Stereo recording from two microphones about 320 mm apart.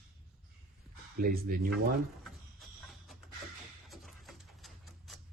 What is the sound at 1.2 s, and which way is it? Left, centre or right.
Speech, right.